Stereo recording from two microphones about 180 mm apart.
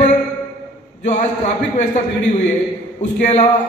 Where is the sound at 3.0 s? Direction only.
40° left (ahead or behind).